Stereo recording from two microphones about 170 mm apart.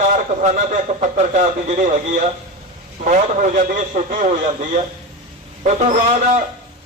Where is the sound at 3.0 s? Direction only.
45° right (ahead or behind).